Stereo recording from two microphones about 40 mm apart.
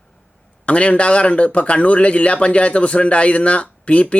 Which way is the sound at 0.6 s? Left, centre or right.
Left.